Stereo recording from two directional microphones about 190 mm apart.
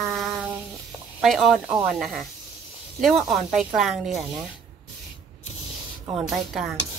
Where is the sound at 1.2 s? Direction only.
Centre (ahead or behind).